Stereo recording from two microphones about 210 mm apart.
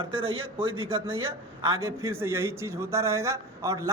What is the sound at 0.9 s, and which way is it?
Speech, 10° right (ahead or behind).